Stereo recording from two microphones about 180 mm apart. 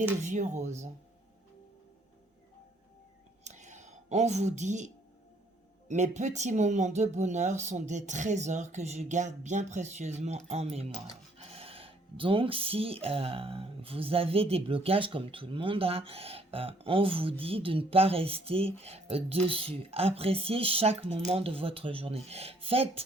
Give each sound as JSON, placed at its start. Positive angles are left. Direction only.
{"t": 0.2, "sound": "speech", "side_deg": -40}
{"t": 3.4, "sound": "whispering", "side_deg": -40}
{"t": 5.9, "sound": "speech", "side_deg": -40}